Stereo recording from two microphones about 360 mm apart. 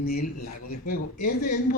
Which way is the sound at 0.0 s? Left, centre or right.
Left.